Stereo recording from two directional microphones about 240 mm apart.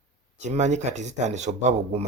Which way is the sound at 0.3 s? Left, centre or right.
Right.